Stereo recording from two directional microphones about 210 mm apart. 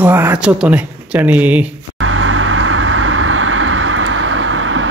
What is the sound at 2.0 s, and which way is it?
Vehicle, 75° right (ahead or behind).